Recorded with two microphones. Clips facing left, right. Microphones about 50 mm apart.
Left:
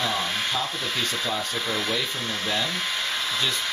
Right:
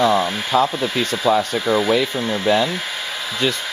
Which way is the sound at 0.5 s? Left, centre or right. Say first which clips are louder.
Right 16 dB; right.